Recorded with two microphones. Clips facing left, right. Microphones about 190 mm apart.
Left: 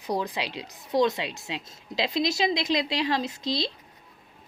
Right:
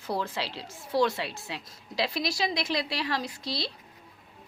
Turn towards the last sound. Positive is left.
turn(degrees=20)  # may be behind; listen again after turning